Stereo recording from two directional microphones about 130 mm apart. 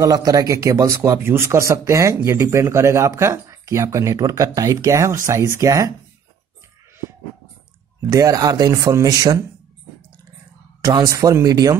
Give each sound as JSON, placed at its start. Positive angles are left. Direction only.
{"t": 0.0, "sound": "speech", "side_deg": -25}
{"t": 8.1, "sound": "speech", "side_deg": -25}
{"t": 10.8, "sound": "speech", "side_deg": -25}